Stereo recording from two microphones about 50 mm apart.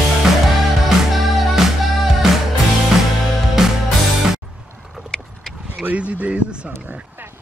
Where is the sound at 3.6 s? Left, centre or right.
Centre.